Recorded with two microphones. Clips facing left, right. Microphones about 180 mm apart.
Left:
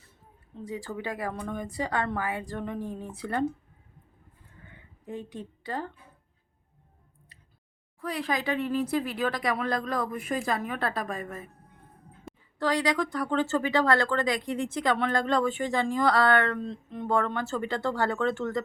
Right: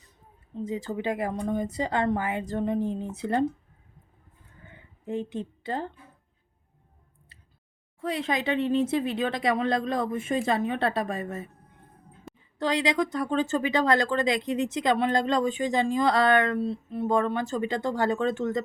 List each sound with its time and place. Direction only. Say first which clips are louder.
0.6 s speech: right 5 dB; 20° right (ahead or behind)
5.0 s speech: right 6 dB; 25° right (ahead or behind)
8.0 s speech: right 2 dB; 25° right (ahead or behind)
12.5 s speech: right 1 dB; 20° right (ahead or behind)